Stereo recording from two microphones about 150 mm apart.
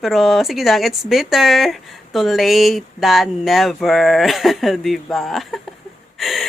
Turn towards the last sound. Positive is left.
turn(degrees=0)  # may be behind; listen again after turning